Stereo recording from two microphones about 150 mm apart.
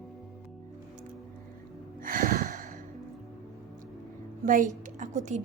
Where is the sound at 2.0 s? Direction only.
65° right (ahead or behind).